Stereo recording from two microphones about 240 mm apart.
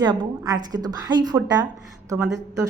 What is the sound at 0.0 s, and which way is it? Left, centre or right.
A woman's voice, centre.